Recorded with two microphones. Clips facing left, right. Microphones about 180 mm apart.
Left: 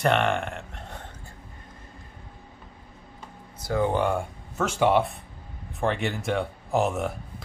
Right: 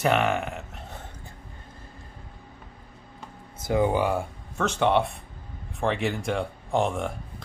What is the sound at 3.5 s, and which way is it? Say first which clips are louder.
Speech: right 1 dB; 20° right (ahead or behind).